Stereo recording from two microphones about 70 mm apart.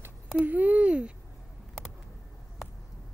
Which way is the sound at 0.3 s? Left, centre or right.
Right.